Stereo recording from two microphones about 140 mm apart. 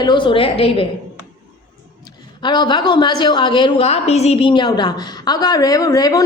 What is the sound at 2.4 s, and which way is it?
Speech, 35° left (ahead or behind).